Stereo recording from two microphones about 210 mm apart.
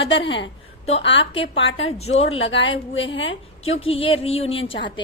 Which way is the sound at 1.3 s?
25° left (ahead or behind).